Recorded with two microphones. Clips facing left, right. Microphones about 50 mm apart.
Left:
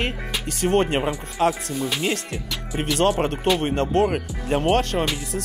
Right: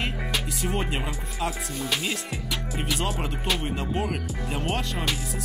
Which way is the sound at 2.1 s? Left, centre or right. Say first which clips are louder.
Left 4 dB; left.